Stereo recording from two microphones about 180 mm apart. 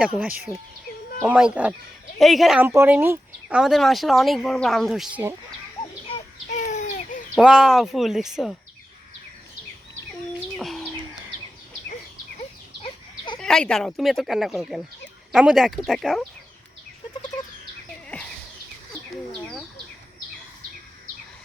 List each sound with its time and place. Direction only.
1.2 s speech: 5° right (ahead or behind)
6.6 s a sound: 40° left (ahead or behind)
7.3 s speech: 5° right (ahead or behind)
10.6 s bird: centre (ahead or behind)
12.8 s a sound: 25° left (ahead or behind)
13.4 s speech: 5° left (ahead or behind)
18.1 s horse: 5° left (ahead or behind)